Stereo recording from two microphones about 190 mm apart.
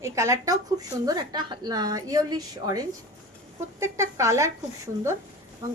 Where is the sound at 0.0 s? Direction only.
15° right (ahead or behind).